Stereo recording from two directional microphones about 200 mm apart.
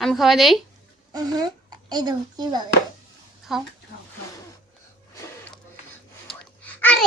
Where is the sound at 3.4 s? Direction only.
Centre (ahead or behind).